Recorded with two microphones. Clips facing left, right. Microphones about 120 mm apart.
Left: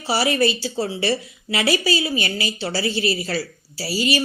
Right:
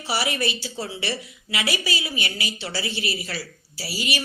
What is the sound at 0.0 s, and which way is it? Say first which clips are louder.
A woman's voice: left 6 dB; 35° left (ahead or behind).